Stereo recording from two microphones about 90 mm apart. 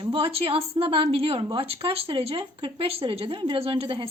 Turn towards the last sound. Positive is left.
turn(degrees=-75)  # may be behind; listen again after turning